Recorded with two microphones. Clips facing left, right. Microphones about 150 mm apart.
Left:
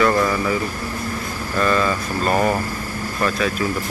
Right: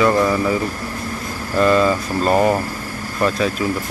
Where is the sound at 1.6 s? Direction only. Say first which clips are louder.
Right 5 dB; 25° right (ahead or behind).